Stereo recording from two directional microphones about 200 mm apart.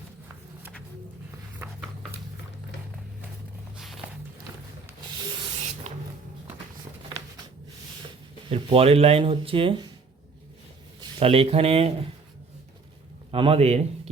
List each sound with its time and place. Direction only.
3.8 s walk: centre (ahead or behind)
5.9 s a sound: 40° right (ahead or behind)
8.4 s speech: 30° right (ahead or behind)
11.0 s speech: 30° right (ahead or behind)
13.3 s a man's voice: 30° right (ahead or behind)